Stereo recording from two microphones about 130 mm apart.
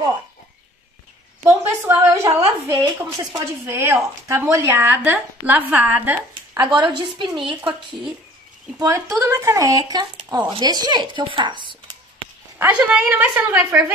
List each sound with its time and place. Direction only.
1.4 s a sound: 15° right (ahead or behind)
2.7 s speech: 25° right (ahead or behind)
6.5 s speech: 35° right (ahead or behind)
8.7 s speech: 25° right (ahead or behind)
12.5 s speech: 10° right (ahead or behind)